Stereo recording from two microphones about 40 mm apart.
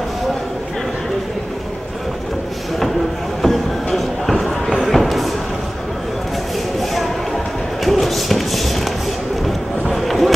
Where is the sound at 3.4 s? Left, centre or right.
Centre.